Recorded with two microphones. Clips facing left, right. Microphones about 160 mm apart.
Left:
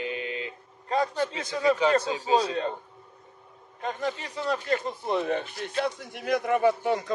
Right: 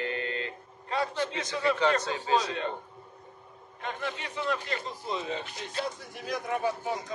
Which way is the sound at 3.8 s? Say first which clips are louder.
Left 5 dB; 40° left (ahead or behind).